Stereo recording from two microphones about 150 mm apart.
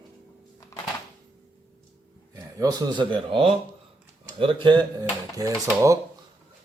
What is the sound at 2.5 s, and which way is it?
Speech, 25° right (ahead or behind).